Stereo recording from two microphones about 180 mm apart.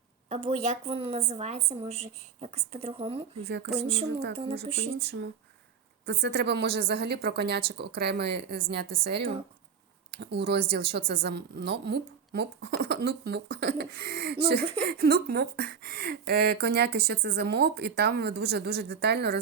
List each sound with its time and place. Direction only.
0.3 s a woman's voice: 35° right (ahead or behind)
4.9 s a woman's voice: 70° right (ahead or behind)